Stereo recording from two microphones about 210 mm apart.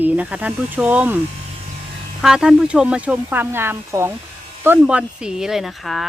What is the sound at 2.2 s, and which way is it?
Speech, centre (ahead or behind).